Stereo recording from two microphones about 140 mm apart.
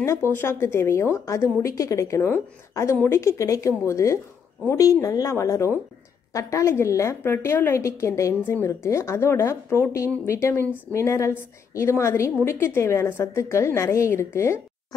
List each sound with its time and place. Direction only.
0.0 s a woman's voice: 20° left (ahead or behind)